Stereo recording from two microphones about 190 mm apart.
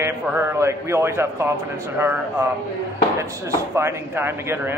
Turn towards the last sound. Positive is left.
turn(degrees=-10)  # may be behind; listen again after turning